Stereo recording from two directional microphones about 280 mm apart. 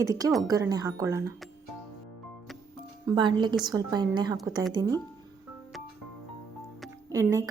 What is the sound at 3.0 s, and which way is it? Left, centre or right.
Speech, centre.